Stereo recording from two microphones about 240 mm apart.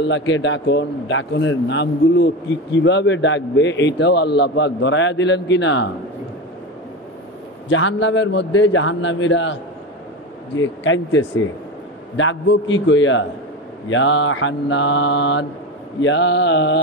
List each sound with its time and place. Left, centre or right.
0.0 s a man's voice: left
7.7 s a man's voice: left